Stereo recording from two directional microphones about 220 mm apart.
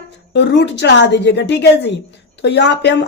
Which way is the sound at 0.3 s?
50° left (ahead or behind).